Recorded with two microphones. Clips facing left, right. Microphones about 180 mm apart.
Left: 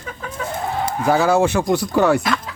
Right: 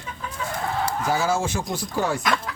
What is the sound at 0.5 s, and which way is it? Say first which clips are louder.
Chicken: left 3 dB; 20° left (ahead or behind).